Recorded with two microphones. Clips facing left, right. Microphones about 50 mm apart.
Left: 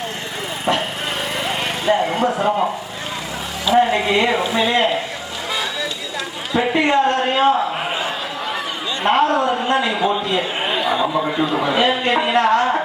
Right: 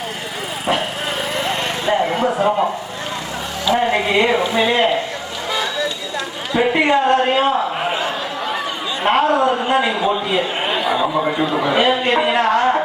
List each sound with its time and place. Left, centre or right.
0.6 s vehicle: centre
3.7 s music: centre
4.0 s a man's voice: centre
6.5 s a sound: centre
9.0 s a man's voice: centre